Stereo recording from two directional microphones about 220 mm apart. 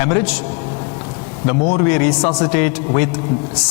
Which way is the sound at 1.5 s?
20° left (ahead or behind).